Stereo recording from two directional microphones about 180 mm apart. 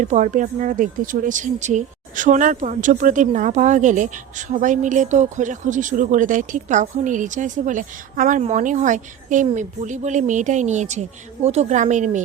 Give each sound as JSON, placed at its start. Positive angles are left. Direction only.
{"t": 0.0, "sound": "speech", "side_deg": -45}